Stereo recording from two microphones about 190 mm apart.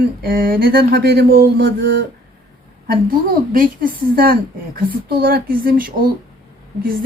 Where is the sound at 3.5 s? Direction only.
45° right (ahead or behind).